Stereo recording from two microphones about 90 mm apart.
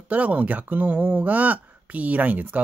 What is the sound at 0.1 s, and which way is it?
Speech, 15° right (ahead or behind).